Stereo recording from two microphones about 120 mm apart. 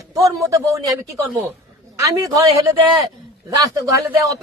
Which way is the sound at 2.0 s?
30° right (ahead or behind).